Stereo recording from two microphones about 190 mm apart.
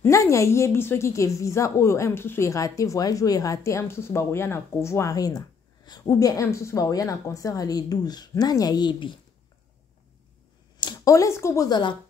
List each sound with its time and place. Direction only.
0.0 s a woman's voice: 15° left (ahead or behind)
10.8 s speech: 20° left (ahead or behind)